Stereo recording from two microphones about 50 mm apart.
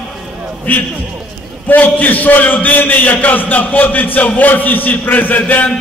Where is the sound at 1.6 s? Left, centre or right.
Left.